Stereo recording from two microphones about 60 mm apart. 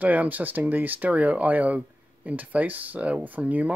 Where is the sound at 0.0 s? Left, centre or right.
Right.